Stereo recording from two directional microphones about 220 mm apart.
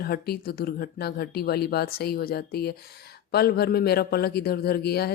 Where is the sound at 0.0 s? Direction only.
45° left (ahead or behind).